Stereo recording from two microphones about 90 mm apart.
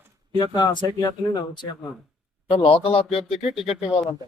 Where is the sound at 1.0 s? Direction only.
45° left (ahead or behind).